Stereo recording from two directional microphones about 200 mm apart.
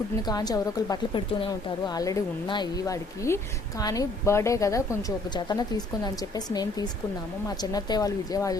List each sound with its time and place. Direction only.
0.3 s a woman's voice: 20° left (ahead or behind)